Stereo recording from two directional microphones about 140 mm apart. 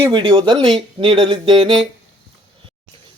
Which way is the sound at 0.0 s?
30° right (ahead or behind).